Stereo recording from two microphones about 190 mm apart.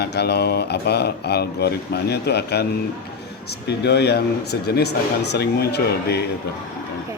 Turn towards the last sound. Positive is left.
turn(degrees=60)  # may be behind; listen again after turning